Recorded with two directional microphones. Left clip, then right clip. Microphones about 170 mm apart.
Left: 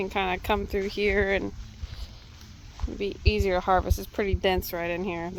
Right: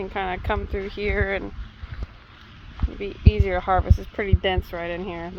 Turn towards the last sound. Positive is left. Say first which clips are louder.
# even
turn(degrees=30)  # may be behind; listen again after turning